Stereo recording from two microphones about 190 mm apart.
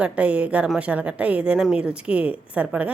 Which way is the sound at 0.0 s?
5° right (ahead or behind).